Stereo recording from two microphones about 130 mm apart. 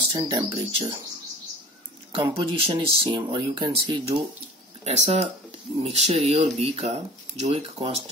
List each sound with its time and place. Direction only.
0.3 s speech: 35° right (ahead or behind)
2.1 s speech: 45° right (ahead or behind)
4.8 s speech: 60° right (ahead or behind)